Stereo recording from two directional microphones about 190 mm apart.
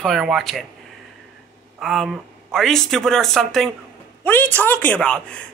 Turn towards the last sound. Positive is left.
turn(degrees=5)  # may be behind; listen again after turning